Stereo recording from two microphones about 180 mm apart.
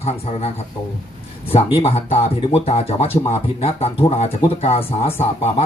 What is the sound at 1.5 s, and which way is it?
Speech, 35° left (ahead or behind).